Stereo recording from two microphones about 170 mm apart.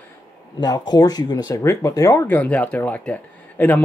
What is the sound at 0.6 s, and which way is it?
Speech, 25° left (ahead or behind).